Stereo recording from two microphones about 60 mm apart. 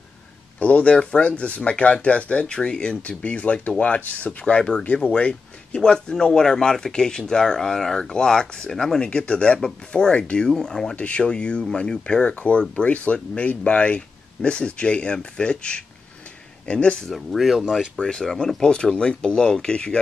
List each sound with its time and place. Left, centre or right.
0.6 s speech: left
11.0 s speech: left
17.1 s speech: centre
18.0 s speech: centre